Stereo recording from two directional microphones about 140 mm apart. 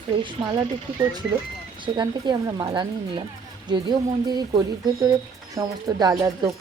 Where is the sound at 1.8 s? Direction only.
35° right (ahead or behind).